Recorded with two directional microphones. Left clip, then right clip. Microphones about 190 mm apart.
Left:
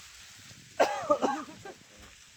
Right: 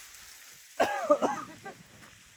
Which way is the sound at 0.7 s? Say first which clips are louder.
Right 1 dB; 35° left (ahead or behind).